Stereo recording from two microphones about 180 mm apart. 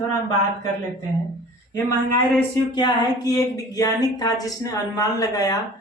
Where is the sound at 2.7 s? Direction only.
20° left (ahead or behind).